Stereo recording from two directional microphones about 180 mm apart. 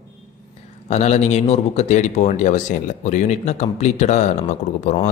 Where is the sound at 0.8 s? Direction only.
40° left (ahead or behind).